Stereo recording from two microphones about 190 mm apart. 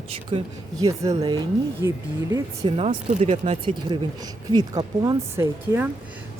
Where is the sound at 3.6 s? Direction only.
25° right (ahead or behind).